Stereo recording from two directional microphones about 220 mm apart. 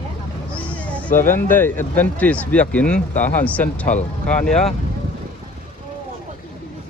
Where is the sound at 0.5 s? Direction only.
5° left (ahead or behind).